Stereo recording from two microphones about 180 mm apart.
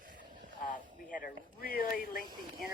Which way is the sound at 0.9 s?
45° left (ahead or behind).